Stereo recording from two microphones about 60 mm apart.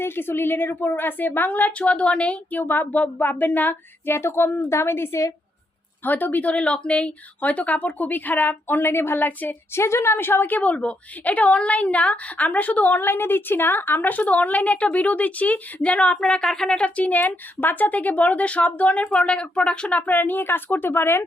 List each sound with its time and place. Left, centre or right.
0.0 s a woman's voice: left
6.1 s a woman's voice: left
9.7 s a woman's voice: left
16.0 s a woman's voice: centre
20.0 s a woman's voice: left